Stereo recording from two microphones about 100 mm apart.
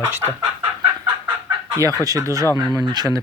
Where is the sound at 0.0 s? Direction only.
20° right (ahead or behind).